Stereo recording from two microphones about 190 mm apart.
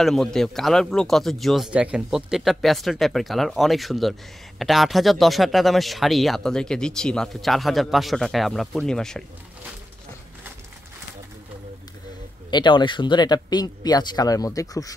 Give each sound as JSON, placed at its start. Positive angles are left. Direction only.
{"t": 0.0, "sound": "speech", "side_deg": 0}
{"t": 12.4, "sound": "speech", "side_deg": 25}